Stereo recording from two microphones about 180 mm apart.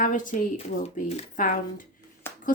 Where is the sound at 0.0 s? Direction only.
45° left (ahead or behind).